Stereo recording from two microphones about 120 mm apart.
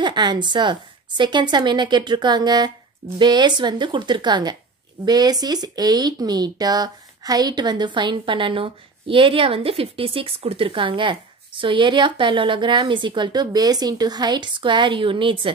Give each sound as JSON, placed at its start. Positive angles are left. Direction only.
{"t": 0.0, "sound": "speech", "side_deg": -40}